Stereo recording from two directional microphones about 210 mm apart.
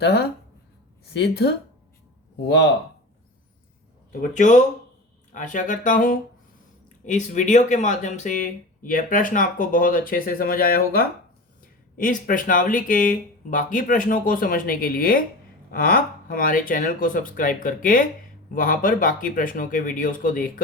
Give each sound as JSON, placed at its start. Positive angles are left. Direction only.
{"t": 0.0, "sound": "speech", "side_deg": 50}
{"t": 4.1, "sound": "speech", "side_deg": 40}